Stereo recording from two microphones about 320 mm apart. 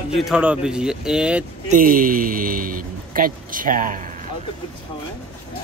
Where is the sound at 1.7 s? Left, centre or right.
Right.